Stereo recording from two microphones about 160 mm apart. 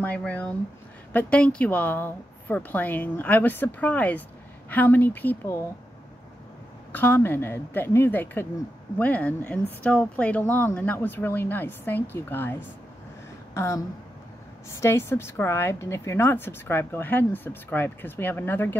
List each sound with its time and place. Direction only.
0.0 s a woman's voice: 10° left (ahead or behind)
6.9 s a woman's voice: 10° left (ahead or behind)